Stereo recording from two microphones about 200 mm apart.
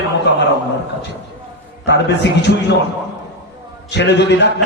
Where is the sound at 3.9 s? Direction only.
60° left (ahead or behind).